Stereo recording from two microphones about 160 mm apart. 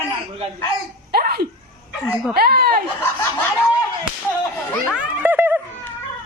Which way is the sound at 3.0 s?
15° left (ahead or behind).